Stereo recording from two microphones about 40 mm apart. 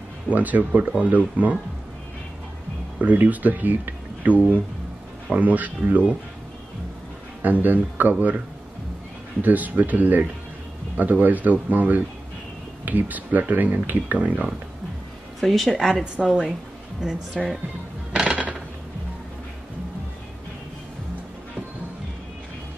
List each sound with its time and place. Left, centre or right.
0.3 s speech: right
3.0 s a man's voice: right
7.4 s a man's voice: right
9.4 s a man's voice: right
15.4 s a woman's voice: centre
15.7 s a woman's voice: centre
18.2 s a sound: right